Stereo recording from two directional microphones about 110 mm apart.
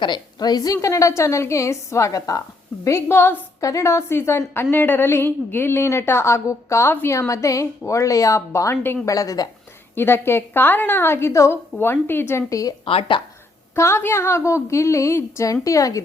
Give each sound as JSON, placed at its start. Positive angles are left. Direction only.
{"t": 0.0, "sound": "a woman's voice", "side_deg": 40}
{"t": 9.0, "sound": "a woman's voice", "side_deg": 30}
{"t": 9.9, "sound": "a woman's voice", "side_deg": 20}
{"t": 12.8, "sound": "speech", "side_deg": 55}
{"t": 13.7, "sound": "a woman's voice", "side_deg": 25}